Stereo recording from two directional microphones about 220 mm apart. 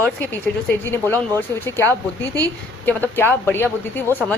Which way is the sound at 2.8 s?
10° left (ahead or behind).